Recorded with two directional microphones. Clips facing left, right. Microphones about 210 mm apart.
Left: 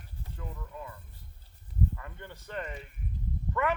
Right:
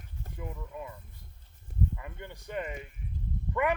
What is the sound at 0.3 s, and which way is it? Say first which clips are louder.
Speech: right 3 dB; 15° right (ahead or behind).